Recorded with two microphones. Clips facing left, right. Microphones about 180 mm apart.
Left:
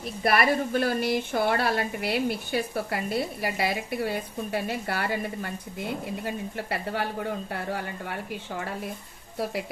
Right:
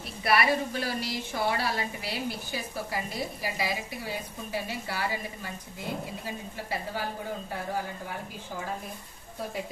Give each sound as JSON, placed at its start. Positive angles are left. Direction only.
{"t": 0.2, "sound": "a woman's voice", "side_deg": 50}